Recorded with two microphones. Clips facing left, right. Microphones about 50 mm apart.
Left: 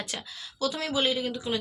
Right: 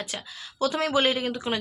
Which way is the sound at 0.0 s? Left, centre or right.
Centre.